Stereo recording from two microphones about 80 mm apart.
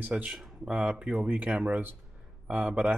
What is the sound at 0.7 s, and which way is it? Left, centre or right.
A man's voice, centre.